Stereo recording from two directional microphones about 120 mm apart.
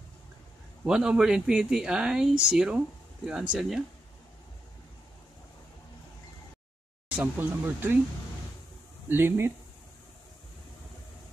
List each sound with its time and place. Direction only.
0.8 s speech: 5° right (ahead or behind)
7.3 s speech: 15° right (ahead or behind)
9.1 s speech: 20° right (ahead or behind)